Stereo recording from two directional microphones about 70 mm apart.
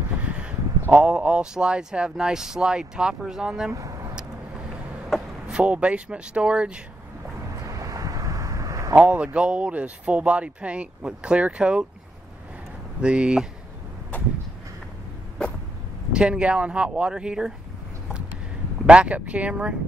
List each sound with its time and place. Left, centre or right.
0.3 s speech: centre
3.7 s vehicle: right
5.5 s speech: centre
7.6 s vehicle: right
8.9 s speech: centre
13.0 s speech: centre
16.1 s speech: centre
18.9 s speech: centre